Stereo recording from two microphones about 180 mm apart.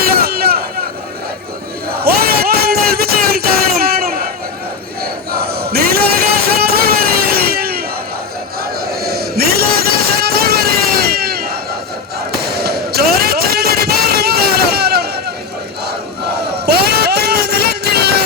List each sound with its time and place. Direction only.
0.1 s vehicle: 60° right (ahead or behind)
2.0 s music: 60° right (ahead or behind)
5.3 s crowd: 60° right (ahead or behind)
6.6 s vehicle: 60° right (ahead or behind)
8.9 s vehicle: 60° right (ahead or behind)
12.3 s a sound: 60° right (ahead or behind)
16.6 s vehicle: 65° right (ahead or behind)